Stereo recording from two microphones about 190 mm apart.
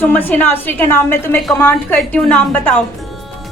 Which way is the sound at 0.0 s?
10° left (ahead or behind).